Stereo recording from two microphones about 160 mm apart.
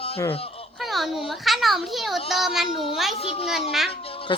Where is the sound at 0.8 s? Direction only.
Centre (ahead or behind).